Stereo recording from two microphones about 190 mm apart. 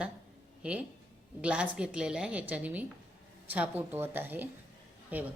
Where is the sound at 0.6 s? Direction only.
5° right (ahead or behind).